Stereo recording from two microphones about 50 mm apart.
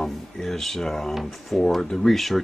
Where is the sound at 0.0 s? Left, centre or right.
Centre.